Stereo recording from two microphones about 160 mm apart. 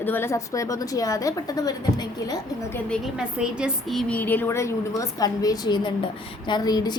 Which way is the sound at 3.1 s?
5° right (ahead or behind).